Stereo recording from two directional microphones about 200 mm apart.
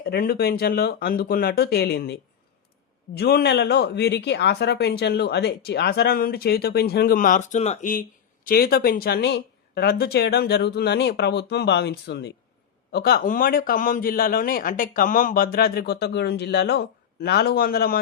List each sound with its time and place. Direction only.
0.0 s a man's voice: 50° left (ahead or behind)
3.2 s a man's voice: 55° left (ahead or behind)